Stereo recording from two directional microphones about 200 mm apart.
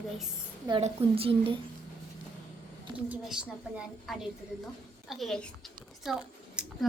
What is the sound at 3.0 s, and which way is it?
A woman's voice, 5° right (ahead or behind).